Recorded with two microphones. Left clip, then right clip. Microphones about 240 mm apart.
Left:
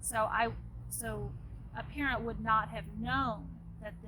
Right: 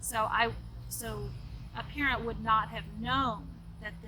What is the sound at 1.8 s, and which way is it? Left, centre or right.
A woman's voice, centre.